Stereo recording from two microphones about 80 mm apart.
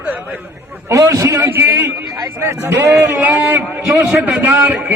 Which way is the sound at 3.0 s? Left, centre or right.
Right.